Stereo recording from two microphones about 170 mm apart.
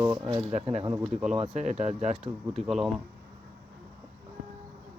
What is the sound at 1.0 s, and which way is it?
Speech, 5° right (ahead or behind).